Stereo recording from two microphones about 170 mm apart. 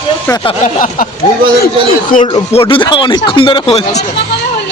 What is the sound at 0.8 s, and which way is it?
Speech, 55° left (ahead or behind).